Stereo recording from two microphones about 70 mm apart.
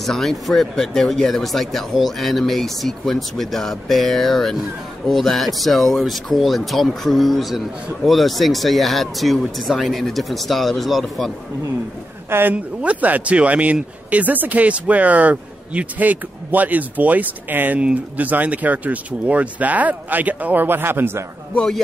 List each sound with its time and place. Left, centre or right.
0.0 s speech: centre
12.3 s speech: right
12.8 s a man's voice: right
21.5 s speech: centre